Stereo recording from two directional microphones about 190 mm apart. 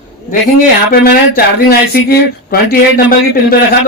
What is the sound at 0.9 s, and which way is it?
Speech, 50° left (ahead or behind).